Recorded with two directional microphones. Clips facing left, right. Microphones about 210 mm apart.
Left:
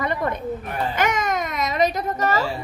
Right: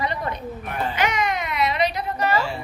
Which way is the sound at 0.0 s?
50° left (ahead or behind).